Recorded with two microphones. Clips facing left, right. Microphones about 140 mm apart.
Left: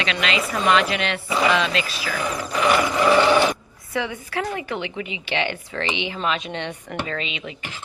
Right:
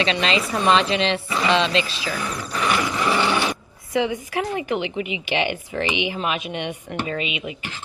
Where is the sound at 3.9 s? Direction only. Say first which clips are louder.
Right 4 dB; 20° right (ahead or behind).